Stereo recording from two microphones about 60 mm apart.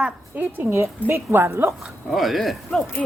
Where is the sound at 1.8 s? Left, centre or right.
Centre.